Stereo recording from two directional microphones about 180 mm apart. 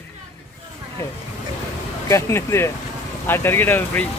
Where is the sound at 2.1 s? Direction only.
15° left (ahead or behind).